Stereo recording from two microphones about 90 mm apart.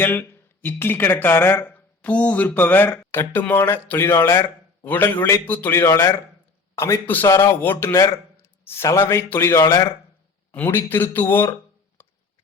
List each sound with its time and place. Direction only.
0.0 s a man's voice: 25° left (ahead or behind)
10.5 s speech: 20° left (ahead or behind)